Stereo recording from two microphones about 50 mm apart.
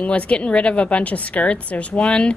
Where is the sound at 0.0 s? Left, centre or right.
Left.